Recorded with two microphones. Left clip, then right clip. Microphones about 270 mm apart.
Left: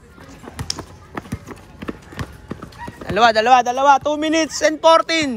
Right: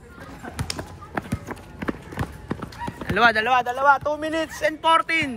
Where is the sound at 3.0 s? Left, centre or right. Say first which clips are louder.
Left 4 dB; centre.